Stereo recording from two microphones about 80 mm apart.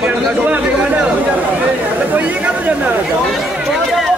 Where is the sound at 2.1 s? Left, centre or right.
Centre.